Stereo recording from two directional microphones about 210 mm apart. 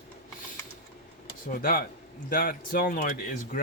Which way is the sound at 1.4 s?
45° left (ahead or behind).